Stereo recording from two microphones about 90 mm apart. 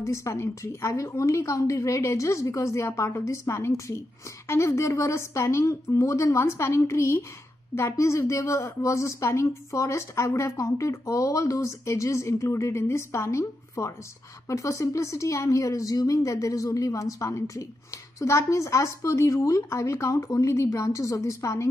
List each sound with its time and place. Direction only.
0.0 s speech: 30° left (ahead or behind)